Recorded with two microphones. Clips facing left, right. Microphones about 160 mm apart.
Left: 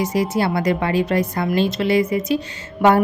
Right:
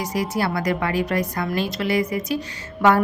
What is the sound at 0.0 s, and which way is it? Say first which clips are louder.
A woman's voice: left 4 dB; 25° left (ahead or behind).